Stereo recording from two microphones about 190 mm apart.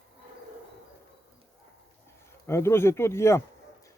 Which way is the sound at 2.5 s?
15° left (ahead or behind).